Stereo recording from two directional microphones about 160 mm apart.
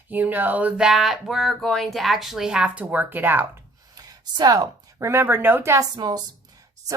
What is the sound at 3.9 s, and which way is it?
A woman's voice, 25° right (ahead or behind).